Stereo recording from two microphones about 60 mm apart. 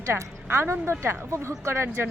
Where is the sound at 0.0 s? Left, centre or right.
Right.